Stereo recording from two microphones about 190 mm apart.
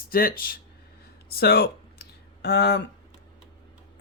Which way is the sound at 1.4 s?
55° left (ahead or behind).